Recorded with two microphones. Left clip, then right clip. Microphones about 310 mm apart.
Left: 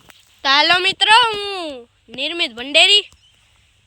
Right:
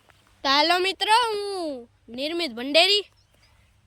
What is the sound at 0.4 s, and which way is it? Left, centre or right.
A woman's voice, centre.